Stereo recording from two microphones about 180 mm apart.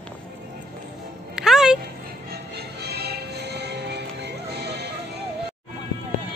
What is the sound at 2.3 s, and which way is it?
Music, 65° right (ahead or behind).